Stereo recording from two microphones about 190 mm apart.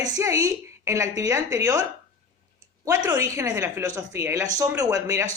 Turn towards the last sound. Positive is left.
turn(degrees=-15)  # may be behind; listen again after turning